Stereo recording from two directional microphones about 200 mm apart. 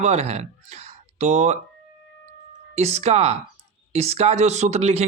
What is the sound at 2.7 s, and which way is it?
Speech, 35° right (ahead or behind).